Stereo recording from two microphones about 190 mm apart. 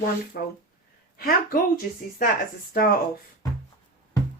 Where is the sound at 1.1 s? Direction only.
50° left (ahead or behind).